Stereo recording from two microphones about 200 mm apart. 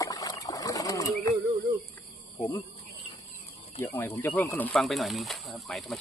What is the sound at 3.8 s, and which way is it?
Speech, 10° left (ahead or behind).